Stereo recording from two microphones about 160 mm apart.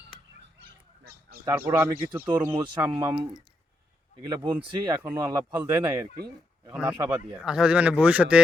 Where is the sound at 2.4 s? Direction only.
25° right (ahead or behind).